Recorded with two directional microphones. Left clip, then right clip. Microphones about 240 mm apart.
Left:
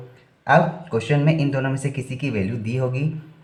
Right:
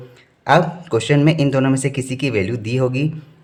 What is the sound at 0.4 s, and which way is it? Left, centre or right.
Speech, right.